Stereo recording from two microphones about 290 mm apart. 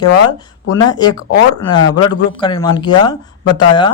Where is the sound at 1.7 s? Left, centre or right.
Centre.